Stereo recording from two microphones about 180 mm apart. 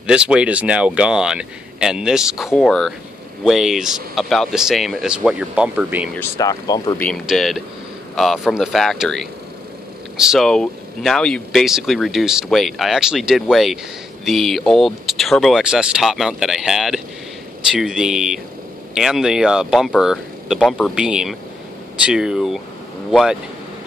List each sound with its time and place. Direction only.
0.0 s speech: 5° right (ahead or behind)
6.1 s speech: 15° left (ahead or behind)
7.0 s speech: centre (ahead or behind)